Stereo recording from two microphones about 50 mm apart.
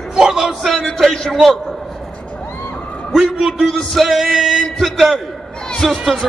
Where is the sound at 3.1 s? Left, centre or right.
Centre.